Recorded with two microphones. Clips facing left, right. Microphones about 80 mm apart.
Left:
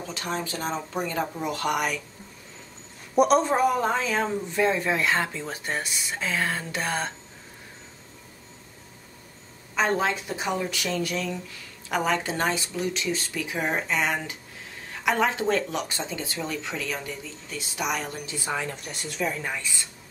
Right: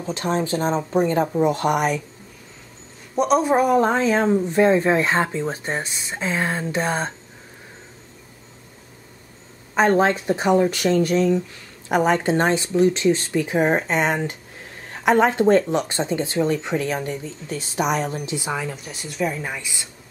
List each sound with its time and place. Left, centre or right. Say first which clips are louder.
0.1 s speech: right 10 dB; right
3.2 s a man's voice: right 1 dB; centre
3.4 s speech: right 6 dB; centre
3.9 s speech: right 7 dB; right
9.8 s speech: right 7 dB; right
18.4 s a woman's voice: right 3 dB; centre